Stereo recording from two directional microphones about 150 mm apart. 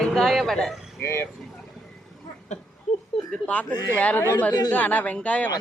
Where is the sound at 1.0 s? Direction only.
15° left (ahead or behind).